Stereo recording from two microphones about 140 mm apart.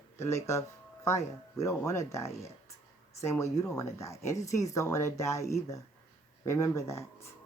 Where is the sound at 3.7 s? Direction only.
20° left (ahead or behind).